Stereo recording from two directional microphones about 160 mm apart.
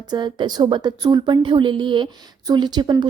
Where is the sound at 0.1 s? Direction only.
25° right (ahead or behind).